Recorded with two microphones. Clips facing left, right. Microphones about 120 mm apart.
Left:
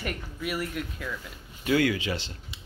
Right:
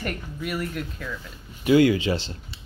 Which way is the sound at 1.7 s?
25° right (ahead or behind).